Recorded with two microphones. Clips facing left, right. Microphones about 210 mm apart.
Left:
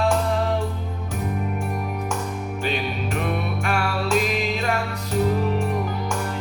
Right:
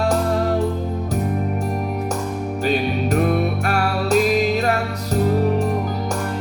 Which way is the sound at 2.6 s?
40° right (ahead or behind).